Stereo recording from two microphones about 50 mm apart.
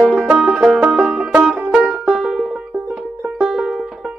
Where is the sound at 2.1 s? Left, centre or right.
Centre.